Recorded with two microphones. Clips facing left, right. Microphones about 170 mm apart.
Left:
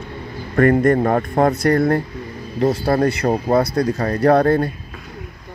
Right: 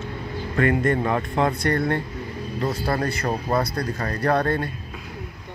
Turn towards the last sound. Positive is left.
turn(degrees=35)  # may be behind; listen again after turning